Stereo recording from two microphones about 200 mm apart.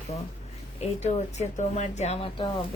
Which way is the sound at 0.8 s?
35° left (ahead or behind).